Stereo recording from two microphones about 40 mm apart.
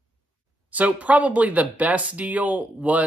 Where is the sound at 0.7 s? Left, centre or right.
Right.